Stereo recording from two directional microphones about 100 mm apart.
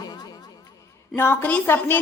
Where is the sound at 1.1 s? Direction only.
25° left (ahead or behind).